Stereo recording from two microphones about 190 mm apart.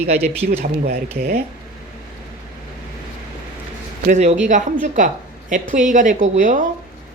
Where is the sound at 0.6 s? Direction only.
55° right (ahead or behind).